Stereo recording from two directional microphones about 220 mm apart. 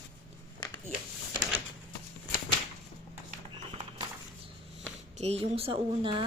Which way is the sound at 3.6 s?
25° right (ahead or behind).